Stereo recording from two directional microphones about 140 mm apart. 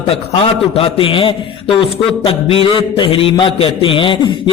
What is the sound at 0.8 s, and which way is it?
A man's voice, 40° left (ahead or behind).